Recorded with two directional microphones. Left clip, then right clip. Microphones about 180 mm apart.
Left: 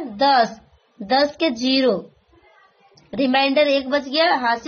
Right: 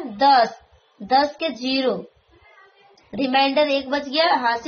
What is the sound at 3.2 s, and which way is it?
A woman's voice, 50° left (ahead or behind).